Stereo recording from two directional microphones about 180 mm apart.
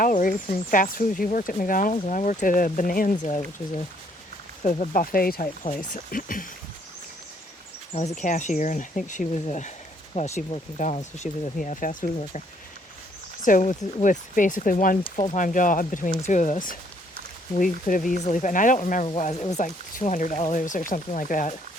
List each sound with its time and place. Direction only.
0.0 s speech: 50° left (ahead or behind)
4.6 s speech: 45° left (ahead or behind)
8.2 s speech: 45° left (ahead or behind)
13.4 s speech: 45° left (ahead or behind)
19.0 s speech: 35° left (ahead or behind)